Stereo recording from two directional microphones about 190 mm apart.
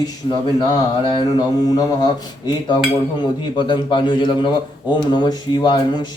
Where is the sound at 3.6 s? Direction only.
25° left (ahead or behind).